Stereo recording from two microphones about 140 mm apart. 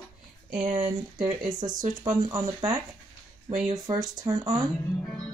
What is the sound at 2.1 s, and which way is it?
Speech, 25° right (ahead or behind).